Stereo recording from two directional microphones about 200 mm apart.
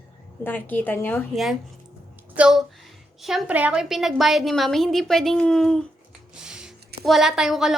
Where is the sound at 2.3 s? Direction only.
5° right (ahead or behind).